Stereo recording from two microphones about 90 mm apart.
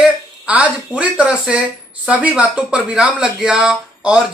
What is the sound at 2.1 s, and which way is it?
Speech, 15° right (ahead or behind).